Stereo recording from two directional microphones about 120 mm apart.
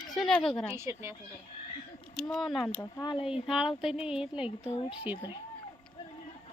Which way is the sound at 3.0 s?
40° left (ahead or behind).